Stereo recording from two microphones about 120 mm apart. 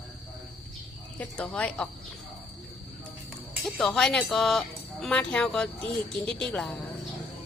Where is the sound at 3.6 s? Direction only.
5° left (ahead or behind).